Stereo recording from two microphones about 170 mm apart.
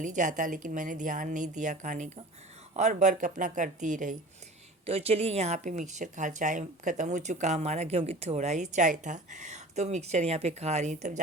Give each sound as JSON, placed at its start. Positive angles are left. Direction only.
{"t": 0.0, "sound": "speech", "side_deg": -50}
{"t": 4.9, "sound": "speech", "side_deg": -35}